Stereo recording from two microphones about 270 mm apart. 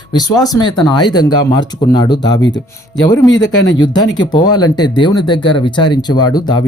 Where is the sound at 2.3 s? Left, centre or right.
Left.